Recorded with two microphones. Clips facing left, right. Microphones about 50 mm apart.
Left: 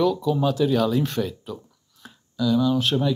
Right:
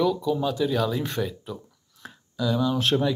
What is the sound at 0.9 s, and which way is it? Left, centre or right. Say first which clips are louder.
Speech: left 4 dB; centre.